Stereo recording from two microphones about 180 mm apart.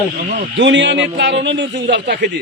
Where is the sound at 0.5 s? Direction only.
85° right; by 2.4 s 65° right (ahead or behind).